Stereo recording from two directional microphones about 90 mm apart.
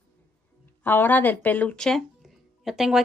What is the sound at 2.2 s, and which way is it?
Music, 5° right (ahead or behind).